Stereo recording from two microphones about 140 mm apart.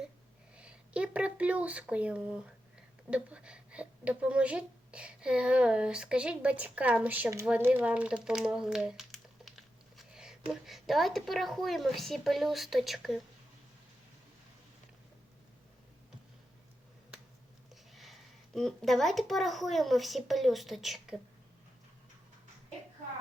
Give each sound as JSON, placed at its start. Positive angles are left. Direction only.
{"t": 0.5, "sound": "a woman's voice", "side_deg": -10}
{"t": 17.9, "sound": "a child's voice", "side_deg": 0}